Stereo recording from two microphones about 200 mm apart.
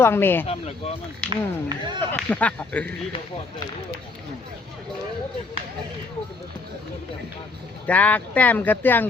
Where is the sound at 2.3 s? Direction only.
5° left (ahead or behind).